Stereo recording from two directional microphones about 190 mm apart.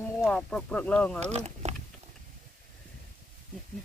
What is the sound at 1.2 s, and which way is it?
Speech, 35° right (ahead or behind).